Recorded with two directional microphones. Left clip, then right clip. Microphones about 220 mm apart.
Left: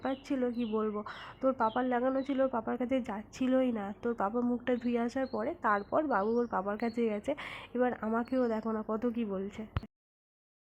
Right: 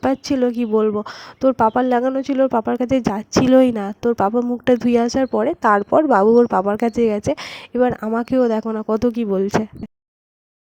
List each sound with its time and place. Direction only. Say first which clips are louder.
0.3 s speech: right 14 dB; 55° right (ahead or behind)
4.0 s speech: right 15 dB; 40° right (ahead or behind)
4.6 s speech: right 16 dB; 60° right (ahead or behind)
5.0 s speech: right 16 dB; 40° right (ahead or behind)